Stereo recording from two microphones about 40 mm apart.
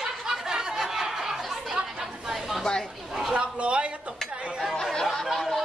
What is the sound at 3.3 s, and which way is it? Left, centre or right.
Dishes, right.